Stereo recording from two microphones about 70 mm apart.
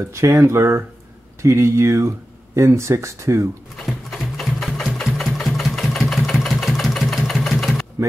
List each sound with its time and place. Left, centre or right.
0.0 s speech: right
3.7 s sewing machine: centre
5.0 s engine: centre